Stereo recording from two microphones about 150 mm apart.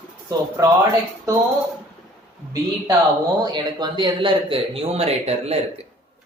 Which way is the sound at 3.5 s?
30° right (ahead or behind).